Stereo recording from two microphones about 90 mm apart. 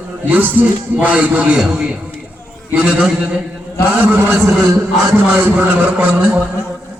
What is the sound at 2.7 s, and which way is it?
A man's voice, 15° right (ahead or behind).